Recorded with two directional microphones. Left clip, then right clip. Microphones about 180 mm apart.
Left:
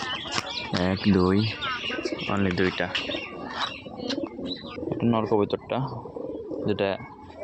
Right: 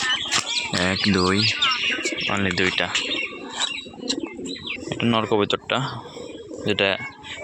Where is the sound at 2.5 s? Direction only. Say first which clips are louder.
Right 4 dB; 15° left (ahead or behind).